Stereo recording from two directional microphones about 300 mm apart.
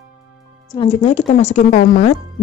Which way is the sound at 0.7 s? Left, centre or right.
Centre.